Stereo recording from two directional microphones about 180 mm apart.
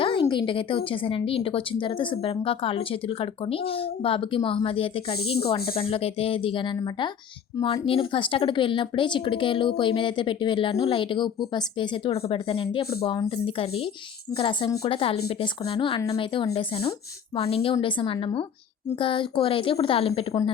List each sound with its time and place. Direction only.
0.0 s a woman's voice: 25° left (ahead or behind)